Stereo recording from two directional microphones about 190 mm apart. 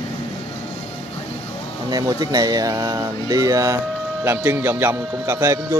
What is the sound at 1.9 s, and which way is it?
A man's voice, 20° right (ahead or behind).